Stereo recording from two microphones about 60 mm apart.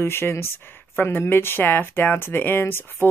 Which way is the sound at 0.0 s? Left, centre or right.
Left.